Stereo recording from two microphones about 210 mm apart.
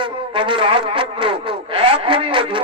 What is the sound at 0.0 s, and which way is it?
Brass instrument, 25° right (ahead or behind).